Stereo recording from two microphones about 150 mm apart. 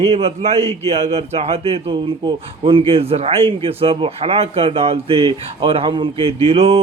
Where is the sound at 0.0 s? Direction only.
40° right (ahead or behind).